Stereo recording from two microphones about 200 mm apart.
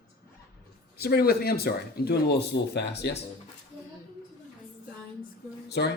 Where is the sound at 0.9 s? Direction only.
50° left (ahead or behind).